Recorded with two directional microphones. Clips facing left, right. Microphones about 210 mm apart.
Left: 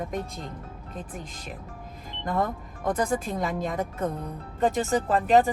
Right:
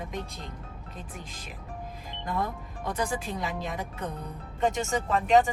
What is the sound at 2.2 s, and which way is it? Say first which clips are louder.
A woman's voice: left 4 dB; 50° left (ahead or behind).